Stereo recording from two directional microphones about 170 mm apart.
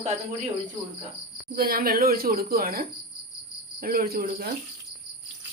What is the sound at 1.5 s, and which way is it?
A woman's voice, 60° right (ahead or behind).